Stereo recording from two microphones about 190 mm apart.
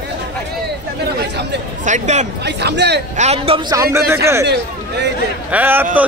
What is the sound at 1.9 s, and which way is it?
Speech, 35° right (ahead or behind).